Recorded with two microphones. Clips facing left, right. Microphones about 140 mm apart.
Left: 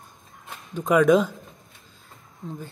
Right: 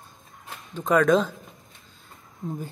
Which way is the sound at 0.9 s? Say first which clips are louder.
Left 2 dB; 10° left (ahead or behind).